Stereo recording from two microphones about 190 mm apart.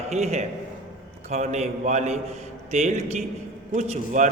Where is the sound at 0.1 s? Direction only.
35° right (ahead or behind).